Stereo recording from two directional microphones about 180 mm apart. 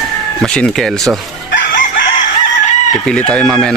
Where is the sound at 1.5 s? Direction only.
80° left.